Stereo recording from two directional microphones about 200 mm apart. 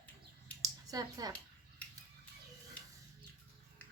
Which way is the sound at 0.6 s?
20° right (ahead or behind).